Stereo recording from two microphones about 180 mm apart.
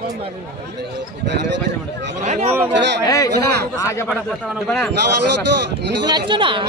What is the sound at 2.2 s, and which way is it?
Speech, 40° right (ahead or behind).